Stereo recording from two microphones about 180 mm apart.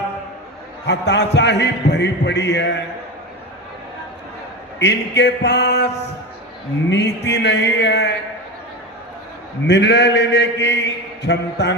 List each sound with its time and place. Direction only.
0.9 s a man's voice: 75° left (ahead or behind)
4.8 s a man's voice: 75° left (ahead or behind)
9.6 s a man's voice: 70° left (ahead or behind)